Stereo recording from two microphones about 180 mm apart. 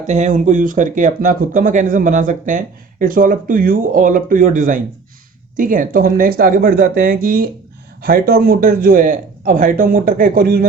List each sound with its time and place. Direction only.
0.1 s speech: 40° right (ahead or behind)